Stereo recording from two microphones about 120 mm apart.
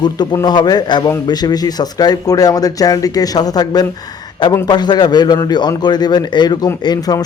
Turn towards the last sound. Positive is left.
turn(degrees=35)  # may be behind; listen again after turning